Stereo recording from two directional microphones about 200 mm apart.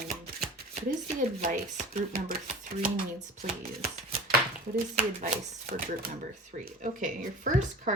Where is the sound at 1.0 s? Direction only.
40° right (ahead or behind).